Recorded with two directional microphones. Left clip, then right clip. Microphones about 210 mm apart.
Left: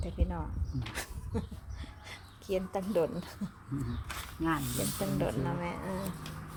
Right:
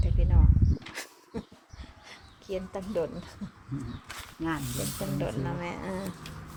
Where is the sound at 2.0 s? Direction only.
25° left (ahead or behind).